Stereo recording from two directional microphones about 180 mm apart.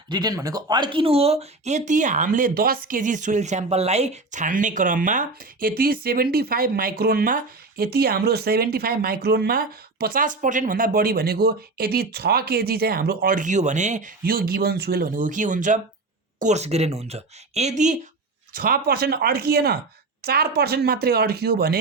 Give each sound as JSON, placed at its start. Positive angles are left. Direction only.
{"t": 0.1, "sound": "speech", "side_deg": -20}
{"t": 18.5, "sound": "speech", "side_deg": -55}